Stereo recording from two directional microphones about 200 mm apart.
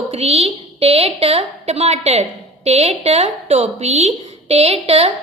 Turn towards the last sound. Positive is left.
turn(degrees=-30)  # may be behind; listen again after turning